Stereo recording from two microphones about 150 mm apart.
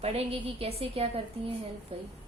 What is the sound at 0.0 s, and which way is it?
A woman's voice, 40° right (ahead or behind).